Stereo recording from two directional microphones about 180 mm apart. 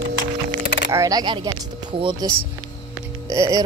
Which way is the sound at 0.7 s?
90° left.